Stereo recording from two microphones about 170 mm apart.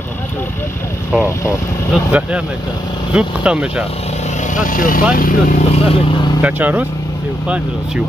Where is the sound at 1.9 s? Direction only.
5° right (ahead or behind).